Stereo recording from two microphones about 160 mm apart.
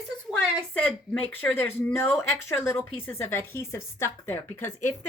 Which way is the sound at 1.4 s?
10° left (ahead or behind).